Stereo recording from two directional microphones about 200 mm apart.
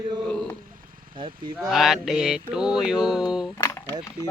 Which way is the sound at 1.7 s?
Centre (ahead or behind).